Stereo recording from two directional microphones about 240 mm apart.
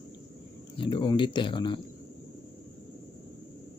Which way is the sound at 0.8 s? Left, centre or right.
Centre.